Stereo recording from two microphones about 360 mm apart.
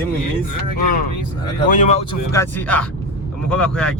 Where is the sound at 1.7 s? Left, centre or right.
Centre.